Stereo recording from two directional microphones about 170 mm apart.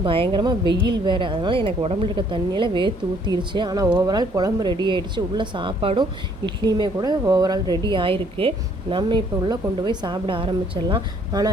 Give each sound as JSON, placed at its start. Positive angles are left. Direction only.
{"t": 0.0, "sound": "speech", "side_deg": -30}